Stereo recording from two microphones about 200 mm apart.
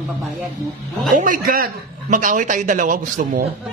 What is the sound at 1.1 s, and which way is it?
A man's voice, 45° right (ahead or behind).